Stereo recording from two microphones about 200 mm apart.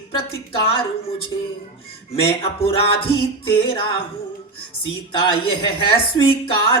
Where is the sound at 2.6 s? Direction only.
30° left (ahead or behind).